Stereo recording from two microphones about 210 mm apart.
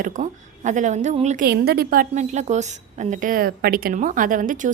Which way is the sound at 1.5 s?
50° right (ahead or behind).